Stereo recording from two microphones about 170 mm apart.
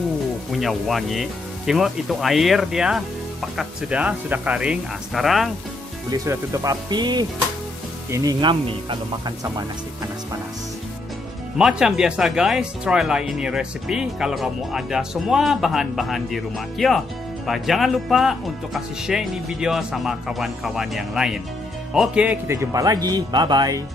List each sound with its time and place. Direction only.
0.5 s speech: centre (ahead or behind)
6.0 s speech: 20° right (ahead or behind)
11.5 s speech: 5° right (ahead or behind); by 23.8 s 25° right (ahead or behind)